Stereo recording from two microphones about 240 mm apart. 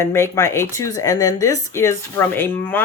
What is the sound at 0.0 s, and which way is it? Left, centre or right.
Speech, centre.